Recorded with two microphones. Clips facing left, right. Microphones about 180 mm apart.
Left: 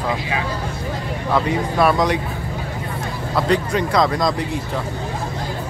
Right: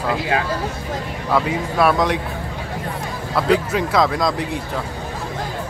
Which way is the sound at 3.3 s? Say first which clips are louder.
Right 1 dB; 5° right (ahead or behind).